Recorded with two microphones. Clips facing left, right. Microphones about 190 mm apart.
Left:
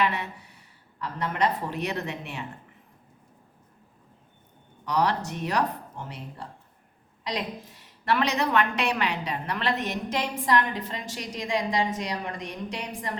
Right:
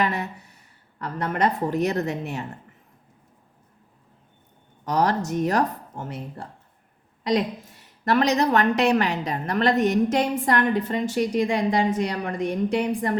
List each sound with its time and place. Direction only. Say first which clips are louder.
0.0 s speech: right 2 dB; 45° right (ahead or behind)
4.9 s a woman's voice: right 3 dB; 45° right (ahead or behind)